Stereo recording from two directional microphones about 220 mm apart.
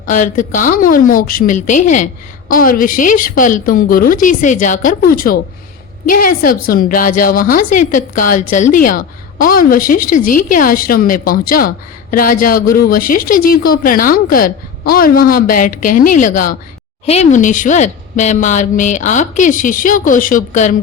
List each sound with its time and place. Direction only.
0.0 s a woman's voice: 35° left (ahead or behind)